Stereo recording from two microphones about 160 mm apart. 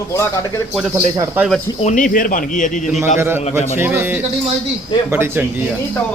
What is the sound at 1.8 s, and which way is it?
Speech, 55° left (ahead or behind).